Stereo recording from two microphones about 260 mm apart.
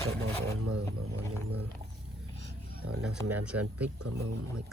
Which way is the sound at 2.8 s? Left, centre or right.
Right.